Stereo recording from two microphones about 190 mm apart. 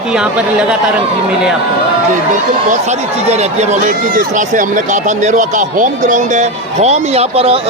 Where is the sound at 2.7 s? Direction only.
35° right (ahead or behind).